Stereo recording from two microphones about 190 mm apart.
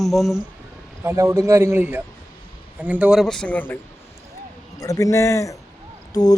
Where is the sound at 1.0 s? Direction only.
15° right (ahead or behind); by 3.8 s 10° left (ahead or behind).